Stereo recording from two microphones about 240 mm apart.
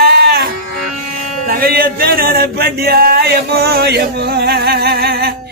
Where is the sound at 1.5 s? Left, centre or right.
Right.